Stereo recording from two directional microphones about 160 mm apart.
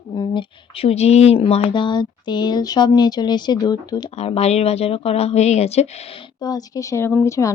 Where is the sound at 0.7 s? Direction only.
40° left (ahead or behind).